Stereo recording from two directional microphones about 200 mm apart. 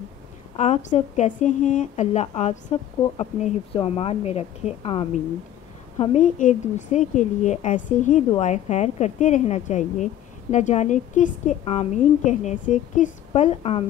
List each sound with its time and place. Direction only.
0.6 s a woman's voice: 35° left (ahead or behind)